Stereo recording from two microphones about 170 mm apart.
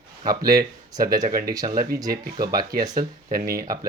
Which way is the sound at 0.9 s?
20° right (ahead or behind).